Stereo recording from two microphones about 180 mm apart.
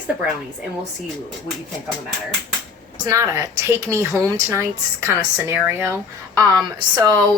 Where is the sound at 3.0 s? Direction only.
15° right (ahead or behind).